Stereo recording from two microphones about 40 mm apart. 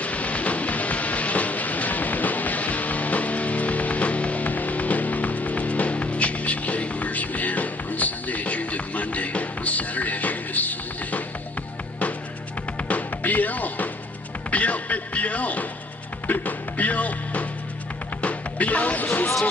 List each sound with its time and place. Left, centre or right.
0.0 s music: left
12.7 s music: left